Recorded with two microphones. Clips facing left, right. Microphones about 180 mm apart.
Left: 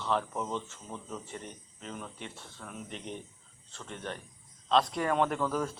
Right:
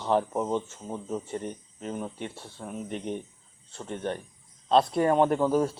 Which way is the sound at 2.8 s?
45° right (ahead or behind).